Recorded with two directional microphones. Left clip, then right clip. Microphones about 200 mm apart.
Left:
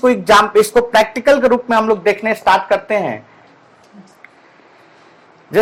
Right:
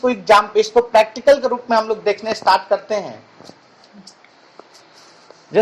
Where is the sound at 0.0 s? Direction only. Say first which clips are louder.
Left 3 dB; 45° left (ahead or behind).